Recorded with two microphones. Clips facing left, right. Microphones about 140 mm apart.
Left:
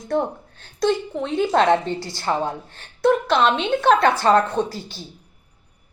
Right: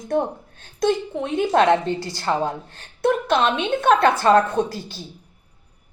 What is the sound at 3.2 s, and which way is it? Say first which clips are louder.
Speech: left 1 dB; 50° right (ahead or behind).